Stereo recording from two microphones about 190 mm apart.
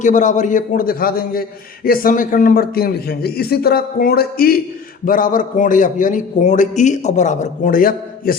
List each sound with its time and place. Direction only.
0.0 s a man's voice: 40° left (ahead or behind)